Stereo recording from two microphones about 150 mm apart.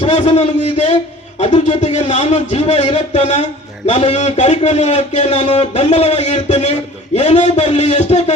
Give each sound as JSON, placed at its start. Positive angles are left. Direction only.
{"t": 0.0, "sound": "a man's voice", "side_deg": 50}